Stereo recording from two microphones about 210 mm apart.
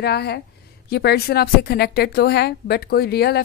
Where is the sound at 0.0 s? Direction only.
50° left (ahead or behind).